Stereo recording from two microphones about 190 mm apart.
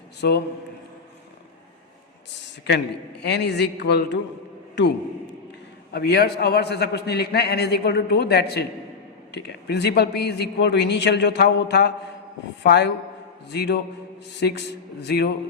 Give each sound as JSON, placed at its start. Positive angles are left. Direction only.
{"t": 0.2, "sound": "speech", "side_deg": 60}
{"t": 2.4, "sound": "a man's voice", "side_deg": 60}
{"t": 14.3, "sound": "speech", "side_deg": 65}